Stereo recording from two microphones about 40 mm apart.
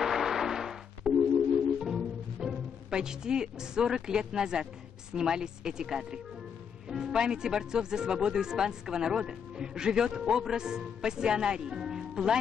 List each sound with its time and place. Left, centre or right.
0.0 s music: centre
5.1 s speech: centre